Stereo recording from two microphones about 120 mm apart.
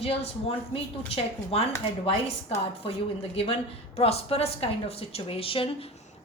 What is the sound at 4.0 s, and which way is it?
A woman's voice, 55° left (ahead or behind).